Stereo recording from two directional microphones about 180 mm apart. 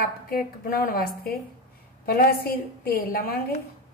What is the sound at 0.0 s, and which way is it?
A woman's voice, 55° left (ahead or behind).